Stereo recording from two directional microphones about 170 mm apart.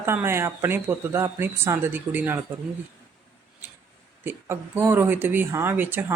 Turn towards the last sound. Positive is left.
turn(degrees=-10)  # may be behind; listen again after turning